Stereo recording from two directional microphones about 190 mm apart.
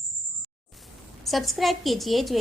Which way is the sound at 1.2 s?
Centre (ahead or behind).